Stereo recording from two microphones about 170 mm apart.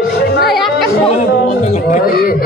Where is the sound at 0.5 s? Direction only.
Centre (ahead or behind).